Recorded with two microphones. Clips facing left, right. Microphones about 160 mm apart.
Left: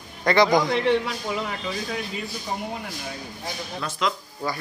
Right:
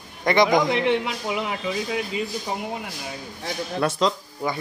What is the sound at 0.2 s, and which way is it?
A man's voice, 20° right (ahead or behind).